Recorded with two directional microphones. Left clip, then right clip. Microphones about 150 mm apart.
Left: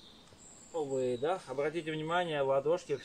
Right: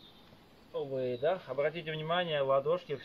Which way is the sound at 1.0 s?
15° left (ahead or behind).